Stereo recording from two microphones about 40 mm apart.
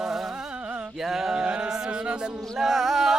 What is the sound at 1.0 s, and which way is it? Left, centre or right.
Music, centre.